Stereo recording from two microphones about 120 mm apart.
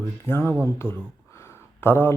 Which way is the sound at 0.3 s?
20° left (ahead or behind).